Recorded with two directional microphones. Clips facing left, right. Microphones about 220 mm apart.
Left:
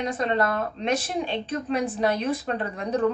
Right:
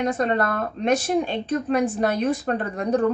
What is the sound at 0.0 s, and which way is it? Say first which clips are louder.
Speech: right 3 dB; 50° right (ahead or behind).